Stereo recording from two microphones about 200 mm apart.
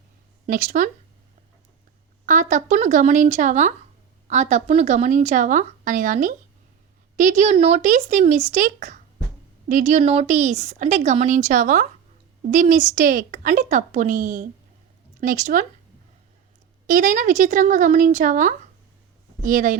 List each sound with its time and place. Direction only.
0.4 s a woman's voice: 40° right (ahead or behind)
2.2 s a woman's voice: 40° right (ahead or behind)
16.8 s a woman's voice: 40° right (ahead or behind)